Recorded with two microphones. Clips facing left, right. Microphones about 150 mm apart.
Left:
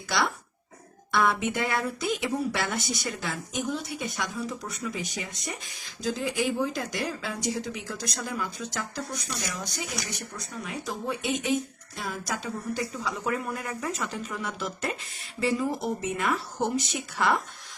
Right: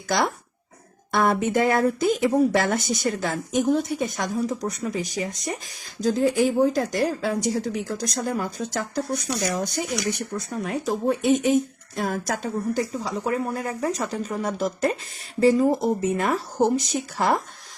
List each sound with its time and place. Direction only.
0.1 s speech: 40° right (ahead or behind)
12.9 s speech: 35° right (ahead or behind)